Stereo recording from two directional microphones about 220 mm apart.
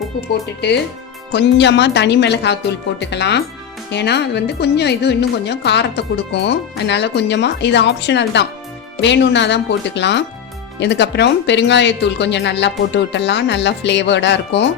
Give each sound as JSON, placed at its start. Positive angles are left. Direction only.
{"t": 1.3, "sound": "a woman's voice", "side_deg": 50}